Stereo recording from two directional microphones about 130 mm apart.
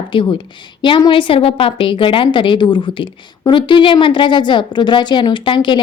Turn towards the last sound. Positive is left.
turn(degrees=40)  # may be behind; listen again after turning